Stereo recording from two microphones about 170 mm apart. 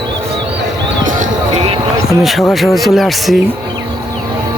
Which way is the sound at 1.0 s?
45° right (ahead or behind).